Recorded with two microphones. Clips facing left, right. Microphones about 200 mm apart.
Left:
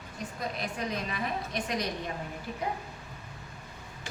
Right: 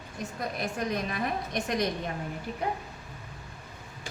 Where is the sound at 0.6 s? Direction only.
50° right (ahead or behind).